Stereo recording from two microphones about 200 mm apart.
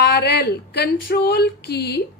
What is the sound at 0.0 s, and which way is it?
A woman's voice, 55° left (ahead or behind).